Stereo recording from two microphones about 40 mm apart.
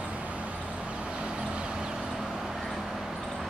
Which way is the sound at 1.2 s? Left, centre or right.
Right.